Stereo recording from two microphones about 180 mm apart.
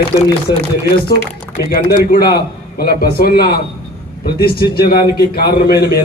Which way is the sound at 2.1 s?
60° left (ahead or behind).